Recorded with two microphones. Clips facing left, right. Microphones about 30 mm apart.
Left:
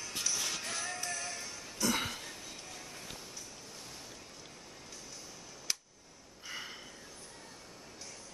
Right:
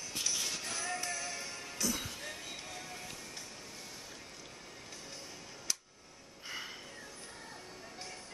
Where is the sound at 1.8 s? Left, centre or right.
Left.